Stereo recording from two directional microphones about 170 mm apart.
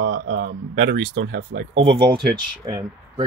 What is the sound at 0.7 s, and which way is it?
Speech, 90° right.